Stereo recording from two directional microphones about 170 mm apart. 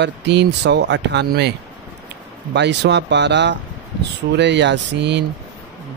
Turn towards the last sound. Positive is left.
turn(degrees=-90)